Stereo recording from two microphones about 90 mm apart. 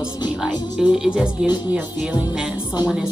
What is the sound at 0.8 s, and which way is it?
Speech, 5° right (ahead or behind).